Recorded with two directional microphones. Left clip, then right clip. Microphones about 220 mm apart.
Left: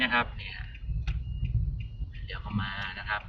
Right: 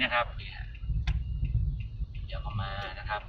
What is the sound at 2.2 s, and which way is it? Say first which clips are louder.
Speech: left 3 dB; 20° left (ahead or behind).